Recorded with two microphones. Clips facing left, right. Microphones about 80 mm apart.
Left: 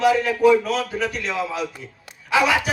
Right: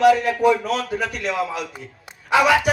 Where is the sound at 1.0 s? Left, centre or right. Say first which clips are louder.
Right 1 dB; right.